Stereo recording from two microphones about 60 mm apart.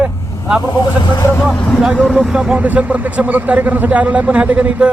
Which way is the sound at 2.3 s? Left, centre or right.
Centre.